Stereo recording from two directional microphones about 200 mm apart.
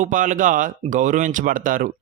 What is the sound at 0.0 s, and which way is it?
Speech, 40° right (ahead or behind).